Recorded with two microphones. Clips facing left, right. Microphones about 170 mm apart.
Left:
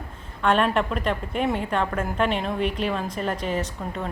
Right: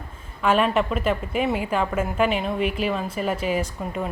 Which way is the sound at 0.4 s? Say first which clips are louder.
Right 1 dB; 5° right (ahead or behind).